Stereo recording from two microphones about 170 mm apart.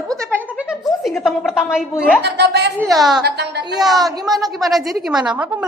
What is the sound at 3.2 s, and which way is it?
Speech, 75° right (ahead or behind).